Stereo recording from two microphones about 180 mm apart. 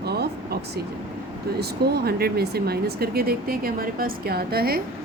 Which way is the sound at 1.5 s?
60° right (ahead or behind).